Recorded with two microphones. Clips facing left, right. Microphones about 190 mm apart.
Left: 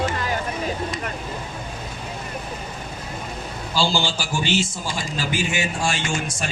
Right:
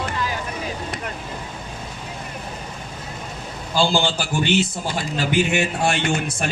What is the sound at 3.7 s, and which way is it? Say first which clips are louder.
A man's voice: right 3 dB; 55° right (ahead or behind).